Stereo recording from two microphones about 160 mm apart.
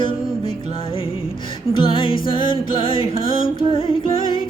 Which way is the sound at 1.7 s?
30° left (ahead or behind).